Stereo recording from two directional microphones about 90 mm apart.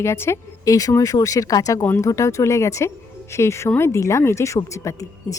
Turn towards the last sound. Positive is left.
turn(degrees=35)  # may be behind; listen again after turning